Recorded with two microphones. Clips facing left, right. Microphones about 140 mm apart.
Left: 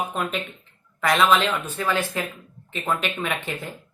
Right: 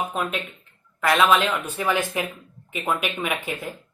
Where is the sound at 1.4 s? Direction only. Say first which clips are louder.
Right 1 dB; 15° right (ahead or behind).